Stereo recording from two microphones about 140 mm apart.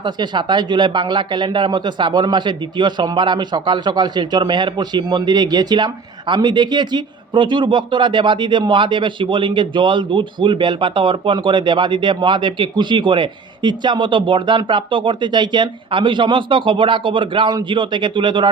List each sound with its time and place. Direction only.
0.0 s speech: 30° right (ahead or behind)